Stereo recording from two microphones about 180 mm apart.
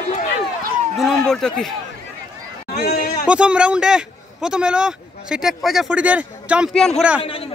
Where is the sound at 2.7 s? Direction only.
60° left (ahead or behind).